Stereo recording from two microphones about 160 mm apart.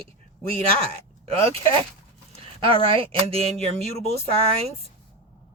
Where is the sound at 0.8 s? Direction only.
35° right (ahead or behind).